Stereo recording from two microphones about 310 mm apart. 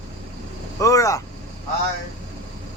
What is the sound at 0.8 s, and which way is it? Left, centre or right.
Speech, centre.